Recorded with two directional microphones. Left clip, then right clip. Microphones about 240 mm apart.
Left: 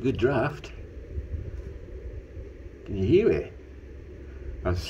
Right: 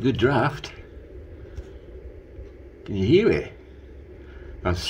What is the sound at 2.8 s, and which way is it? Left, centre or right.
Speech, centre.